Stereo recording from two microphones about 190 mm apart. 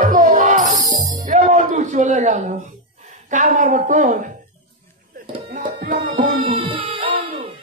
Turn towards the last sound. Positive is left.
turn(degrees=-30)  # may be behind; listen again after turning